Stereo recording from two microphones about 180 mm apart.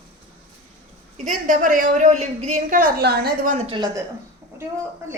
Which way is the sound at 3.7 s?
25° right (ahead or behind).